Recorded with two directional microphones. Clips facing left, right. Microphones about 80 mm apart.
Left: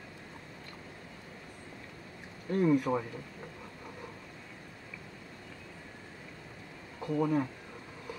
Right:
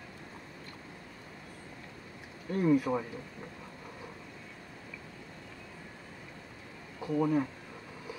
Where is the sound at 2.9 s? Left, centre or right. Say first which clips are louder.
Left 1 dB; centre.